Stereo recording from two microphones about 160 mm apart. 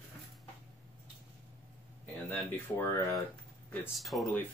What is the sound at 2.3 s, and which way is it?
Speech, 10° left (ahead or behind).